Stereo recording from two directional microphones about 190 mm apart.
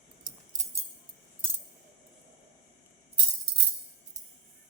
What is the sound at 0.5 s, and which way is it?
Music, 40° right (ahead or behind).